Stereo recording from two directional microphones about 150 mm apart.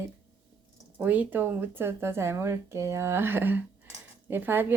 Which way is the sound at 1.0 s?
10° right (ahead or behind).